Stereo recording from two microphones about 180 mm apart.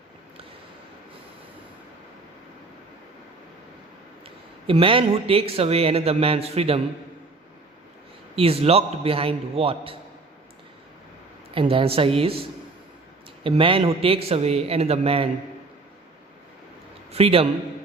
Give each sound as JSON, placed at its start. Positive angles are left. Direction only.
{"t": 4.6, "sound": "speech", "side_deg": -30}
{"t": 8.4, "sound": "speech", "side_deg": -35}
{"t": 11.5, "sound": "speech", "side_deg": -30}
{"t": 17.1, "sound": "a man's voice", "side_deg": -35}